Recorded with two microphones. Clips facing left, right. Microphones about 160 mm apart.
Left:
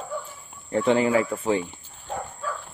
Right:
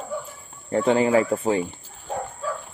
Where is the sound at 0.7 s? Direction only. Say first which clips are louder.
Right 2 dB; 35° right (ahead or behind).